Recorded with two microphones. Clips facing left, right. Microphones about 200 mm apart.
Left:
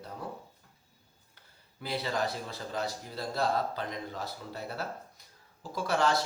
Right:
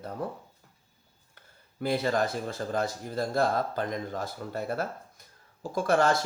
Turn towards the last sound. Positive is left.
turn(degrees=-50)  # may be behind; listen again after turning